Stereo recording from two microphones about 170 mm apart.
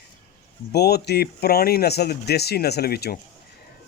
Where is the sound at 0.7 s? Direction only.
75° left (ahead or behind).